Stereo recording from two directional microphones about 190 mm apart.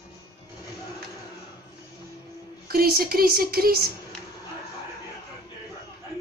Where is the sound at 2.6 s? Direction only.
50° right (ahead or behind).